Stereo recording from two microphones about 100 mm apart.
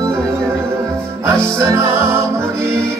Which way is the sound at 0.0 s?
30° right (ahead or behind).